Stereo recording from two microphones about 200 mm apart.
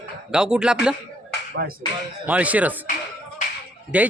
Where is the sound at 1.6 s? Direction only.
50° right (ahead or behind).